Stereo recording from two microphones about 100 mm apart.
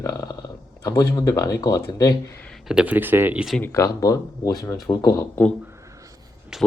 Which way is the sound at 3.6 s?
30° left (ahead or behind).